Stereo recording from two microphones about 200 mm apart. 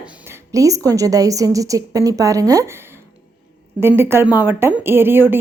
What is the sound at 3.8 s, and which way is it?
A woman's voice, 10° right (ahead or behind).